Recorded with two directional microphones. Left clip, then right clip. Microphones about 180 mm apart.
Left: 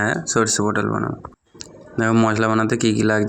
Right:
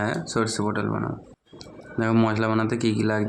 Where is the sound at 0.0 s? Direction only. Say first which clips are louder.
Left 6 dB; 20° left (ahead or behind).